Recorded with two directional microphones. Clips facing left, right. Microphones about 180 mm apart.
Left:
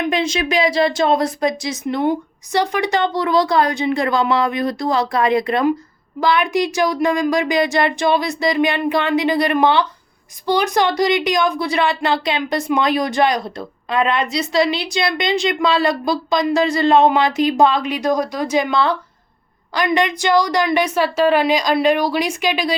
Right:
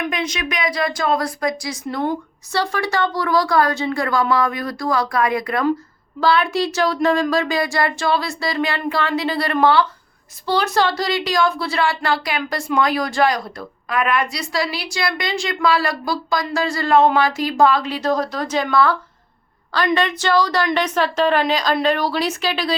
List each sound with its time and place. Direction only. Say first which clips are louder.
0.0 s a woman's voice: left 5 dB; 25° left (ahead or behind)